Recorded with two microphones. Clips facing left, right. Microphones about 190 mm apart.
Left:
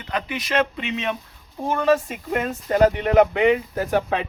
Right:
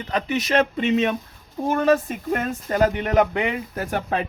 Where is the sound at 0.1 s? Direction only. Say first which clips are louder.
Right 3 dB; 40° right (ahead or behind).